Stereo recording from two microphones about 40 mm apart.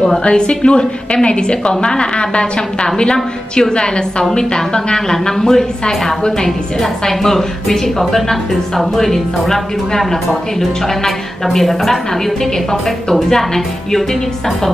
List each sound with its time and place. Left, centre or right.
0.2 s a woman's voice: left; by 12.0 s centre
13.1 s a woman's voice: centre